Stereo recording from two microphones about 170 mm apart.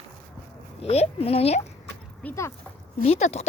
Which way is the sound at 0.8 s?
35° left (ahead or behind).